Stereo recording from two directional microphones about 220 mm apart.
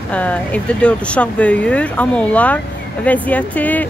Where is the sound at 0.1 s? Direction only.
5° left (ahead or behind).